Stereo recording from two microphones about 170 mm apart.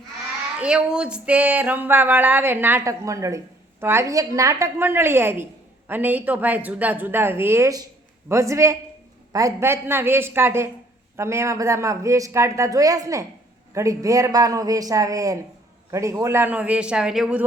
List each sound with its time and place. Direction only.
0.6 s a man's voice: 5° right (ahead or behind)